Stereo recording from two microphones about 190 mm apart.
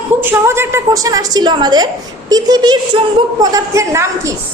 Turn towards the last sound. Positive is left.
turn(degrees=-15)  # may be behind; listen again after turning